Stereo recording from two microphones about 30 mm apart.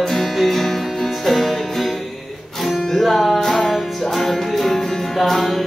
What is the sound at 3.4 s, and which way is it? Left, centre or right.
Music, centre.